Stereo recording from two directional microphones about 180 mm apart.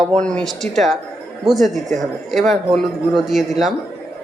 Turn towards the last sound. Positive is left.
turn(degrees=0)  # may be behind; listen again after turning